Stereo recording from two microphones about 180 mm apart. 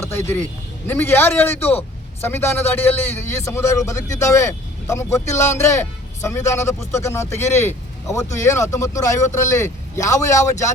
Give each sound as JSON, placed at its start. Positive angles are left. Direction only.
{"t": 0.1, "sound": "a man's voice", "side_deg": 15}